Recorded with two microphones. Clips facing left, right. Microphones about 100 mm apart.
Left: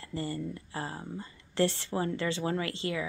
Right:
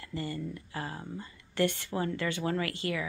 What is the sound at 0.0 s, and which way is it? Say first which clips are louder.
Speech: left 1 dB; 30° left (ahead or behind).